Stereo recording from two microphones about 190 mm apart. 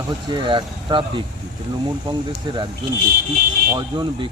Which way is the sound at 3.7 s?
25° right (ahead or behind).